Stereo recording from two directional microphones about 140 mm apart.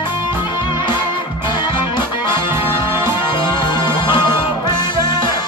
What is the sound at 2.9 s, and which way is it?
Music, 15° right (ahead or behind).